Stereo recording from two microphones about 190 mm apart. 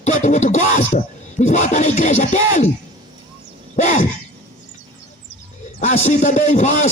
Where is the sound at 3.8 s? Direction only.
40° left (ahead or behind).